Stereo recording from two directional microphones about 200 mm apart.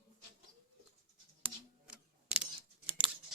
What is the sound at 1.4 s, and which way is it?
Camera, 5° right (ahead or behind).